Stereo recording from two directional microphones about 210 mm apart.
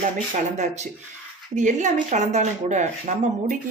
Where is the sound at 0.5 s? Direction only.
35° right (ahead or behind).